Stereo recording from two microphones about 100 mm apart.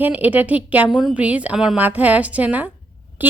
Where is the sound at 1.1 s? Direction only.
15° right (ahead or behind).